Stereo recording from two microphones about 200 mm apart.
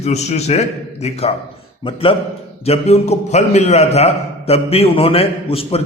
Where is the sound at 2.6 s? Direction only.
30° left (ahead or behind).